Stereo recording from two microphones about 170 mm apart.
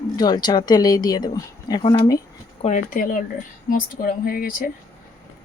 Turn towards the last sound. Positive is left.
turn(degrees=55)  # may be behind; listen again after turning